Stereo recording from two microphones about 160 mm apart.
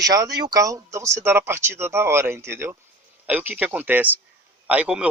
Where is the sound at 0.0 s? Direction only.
25° right (ahead or behind).